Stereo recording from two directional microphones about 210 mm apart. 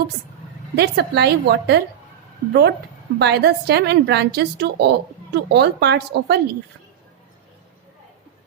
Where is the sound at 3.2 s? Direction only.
55° right (ahead or behind).